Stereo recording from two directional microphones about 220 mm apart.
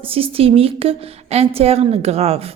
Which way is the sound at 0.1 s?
25° right (ahead or behind).